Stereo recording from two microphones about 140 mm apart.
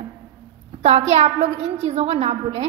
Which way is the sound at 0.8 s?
50° right (ahead or behind).